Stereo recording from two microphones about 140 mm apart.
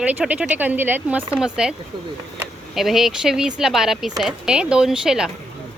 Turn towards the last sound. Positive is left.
turn(degrees=-5)  # may be behind; listen again after turning